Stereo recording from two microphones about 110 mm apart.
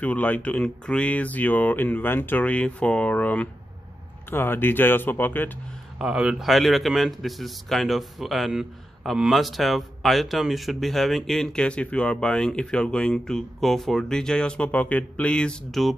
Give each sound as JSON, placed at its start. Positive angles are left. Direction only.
{"t": 0.0, "sound": "speech", "side_deg": 15}
{"t": 5.9, "sound": "a man's voice", "side_deg": -5}